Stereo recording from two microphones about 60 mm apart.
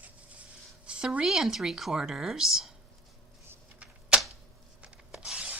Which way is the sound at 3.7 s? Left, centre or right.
Right.